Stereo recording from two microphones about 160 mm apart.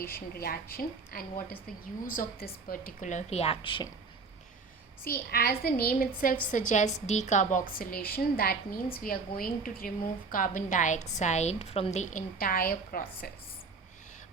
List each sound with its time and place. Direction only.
0.0 s a woman's voice: 70° left (ahead or behind); by 3.8 s 30° left (ahead or behind)
5.1 s a woman's voice: 75° left (ahead or behind)
6.5 s a woman's voice: 50° left (ahead or behind)
7.7 s a woman's voice: 65° left (ahead or behind); by 12.2 s 45° left (ahead or behind)
12.4 s a woman's voice: 65° left (ahead or behind)